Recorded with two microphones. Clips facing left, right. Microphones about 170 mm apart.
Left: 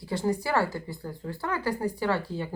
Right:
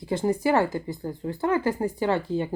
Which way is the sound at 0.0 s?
20° right (ahead or behind).